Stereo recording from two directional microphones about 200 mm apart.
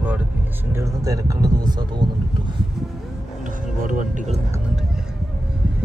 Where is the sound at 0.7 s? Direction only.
15° right (ahead or behind).